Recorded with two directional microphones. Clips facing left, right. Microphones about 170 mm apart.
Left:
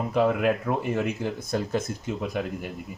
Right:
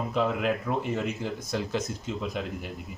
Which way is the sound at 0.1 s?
55° left (ahead or behind).